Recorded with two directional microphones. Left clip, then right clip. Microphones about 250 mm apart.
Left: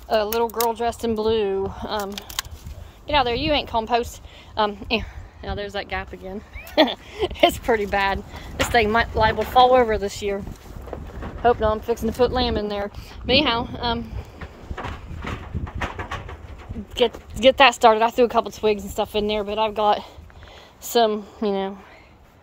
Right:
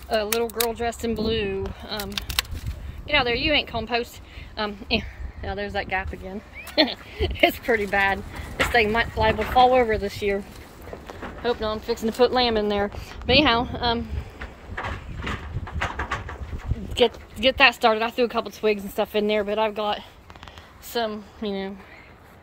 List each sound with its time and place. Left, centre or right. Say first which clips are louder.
0.1 s a woman's voice: left 3 dB; centre
11.4 s speech: left 6 dB; centre
17.4 s a woman's voice: left 4 dB; centre
20.8 s a woman's voice: left 8 dB; left